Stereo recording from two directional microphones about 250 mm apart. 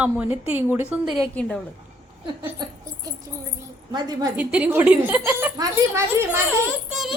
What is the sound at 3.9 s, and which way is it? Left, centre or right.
Speech, centre.